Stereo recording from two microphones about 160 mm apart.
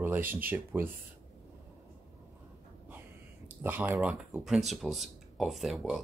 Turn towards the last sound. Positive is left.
turn(degrees=0)  # may be behind; listen again after turning